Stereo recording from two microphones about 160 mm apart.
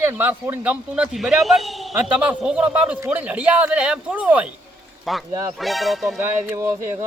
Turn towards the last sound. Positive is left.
turn(degrees=-15)  # may be behind; listen again after turning